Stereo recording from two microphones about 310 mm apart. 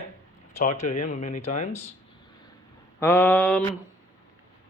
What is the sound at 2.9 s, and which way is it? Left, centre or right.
Mantra, centre.